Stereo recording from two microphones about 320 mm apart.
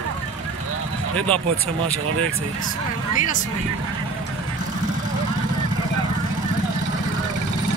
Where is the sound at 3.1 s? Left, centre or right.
Left.